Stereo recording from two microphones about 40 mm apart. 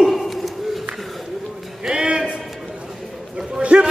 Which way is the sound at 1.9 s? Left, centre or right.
Centre.